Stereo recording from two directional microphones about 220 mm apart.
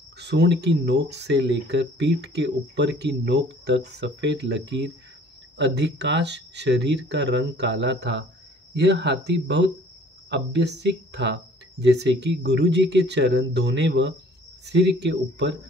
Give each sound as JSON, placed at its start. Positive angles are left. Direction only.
{"t": 0.2, "sound": "speech", "side_deg": -50}